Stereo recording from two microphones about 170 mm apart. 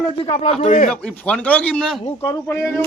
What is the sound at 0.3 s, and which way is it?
Speech, 40° left (ahead or behind).